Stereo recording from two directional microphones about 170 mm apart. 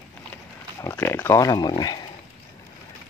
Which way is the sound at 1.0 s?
10° left (ahead or behind).